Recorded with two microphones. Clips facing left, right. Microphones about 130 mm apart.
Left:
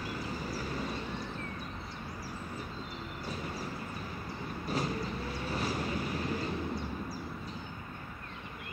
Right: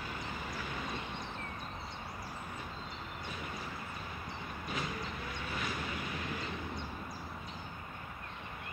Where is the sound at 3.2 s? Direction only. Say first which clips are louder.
Left 5 dB; 35° left (ahead or behind).